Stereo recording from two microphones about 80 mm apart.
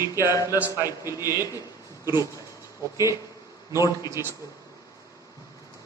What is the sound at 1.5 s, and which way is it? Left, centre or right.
Speech, left.